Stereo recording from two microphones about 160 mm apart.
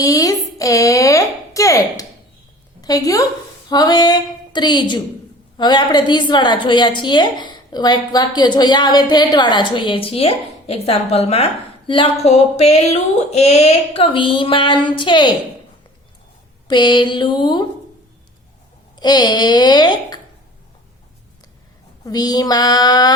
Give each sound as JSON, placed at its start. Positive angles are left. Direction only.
{"t": 0.0, "sound": "a sound", "side_deg": 20}
{"t": 2.8, "sound": "a woman's voice", "side_deg": 20}
{"t": 11.9, "sound": "a sound", "side_deg": 30}
{"t": 16.6, "sound": "a woman's voice", "side_deg": 30}
{"t": 18.9, "sound": "a woman's voice", "side_deg": 25}
{"t": 22.0, "sound": "a woman's voice", "side_deg": 25}